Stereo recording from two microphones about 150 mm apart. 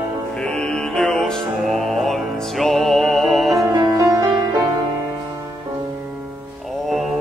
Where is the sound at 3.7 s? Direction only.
25° right (ahead or behind).